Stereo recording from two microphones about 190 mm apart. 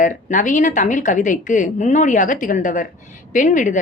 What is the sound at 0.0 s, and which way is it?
A woman's voice, 40° left (ahead or behind).